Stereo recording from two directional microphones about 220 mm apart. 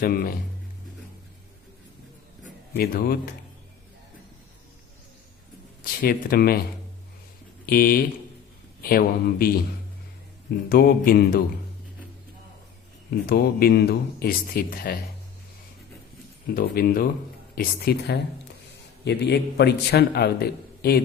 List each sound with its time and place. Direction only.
0.0 s speech: 40° left (ahead or behind)
2.4 s speech: 45° left (ahead or behind)
5.8 s speech: 40° left (ahead or behind)
7.7 s a man's voice: 40° left (ahead or behind)
10.7 s speech: 40° left (ahead or behind)
13.1 s a man's voice: 40° left (ahead or behind)
16.6 s a man's voice: 40° left (ahead or behind)